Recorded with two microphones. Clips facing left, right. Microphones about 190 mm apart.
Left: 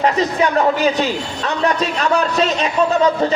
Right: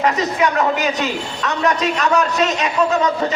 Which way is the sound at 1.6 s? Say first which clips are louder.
Even; 30° left (ahead or behind).